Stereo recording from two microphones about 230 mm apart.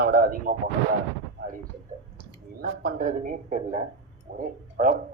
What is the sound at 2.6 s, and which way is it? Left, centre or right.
Speech, right.